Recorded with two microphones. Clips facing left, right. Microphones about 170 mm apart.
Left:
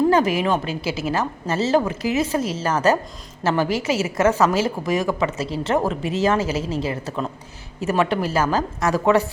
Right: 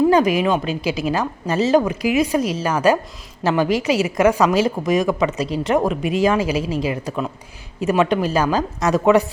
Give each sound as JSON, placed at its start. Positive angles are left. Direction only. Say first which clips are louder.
{"t": 0.1, "sound": "a woman's voice", "louder": "right 3 dB", "side_deg": -15}